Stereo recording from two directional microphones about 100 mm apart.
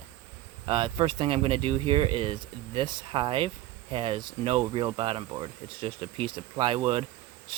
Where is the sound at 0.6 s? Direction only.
55° right (ahead or behind).